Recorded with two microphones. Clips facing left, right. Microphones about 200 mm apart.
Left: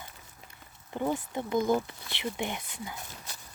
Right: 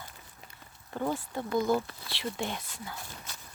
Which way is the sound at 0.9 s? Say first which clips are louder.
Left 2 dB; 15° left (ahead or behind).